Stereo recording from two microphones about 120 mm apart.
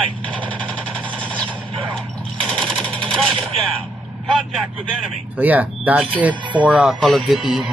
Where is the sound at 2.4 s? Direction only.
5° left (ahead or behind).